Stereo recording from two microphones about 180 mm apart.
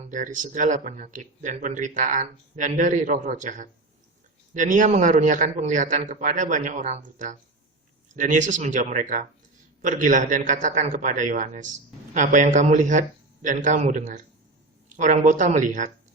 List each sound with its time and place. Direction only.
0.1 s speech: 45° right (ahead or behind)